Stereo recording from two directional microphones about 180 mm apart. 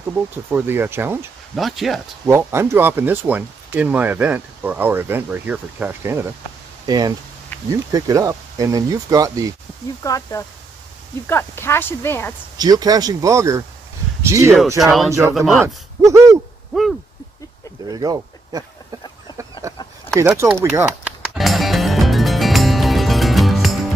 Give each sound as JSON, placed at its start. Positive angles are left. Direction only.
{"t": 0.5, "sound": "speech", "side_deg": -10}
{"t": 1.5, "sound": "speech", "side_deg": 0}
{"t": 2.2, "sound": "speech", "side_deg": -15}
{"t": 10.0, "sound": "speech", "side_deg": 20}
{"t": 12.5, "sound": "speech", "side_deg": -20}
{"t": 14.8, "sound": "speech", "side_deg": 0}
{"t": 15.6, "sound": "speech", "side_deg": -15}
{"t": 17.9, "sound": "a sound", "side_deg": -20}
{"t": 20.2, "sound": "speech", "side_deg": -15}
{"t": 20.4, "sound": "speech", "side_deg": 0}
{"t": 20.7, "sound": "music", "side_deg": -5}